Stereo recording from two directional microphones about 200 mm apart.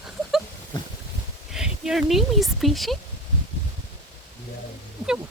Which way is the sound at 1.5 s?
Centre (ahead or behind).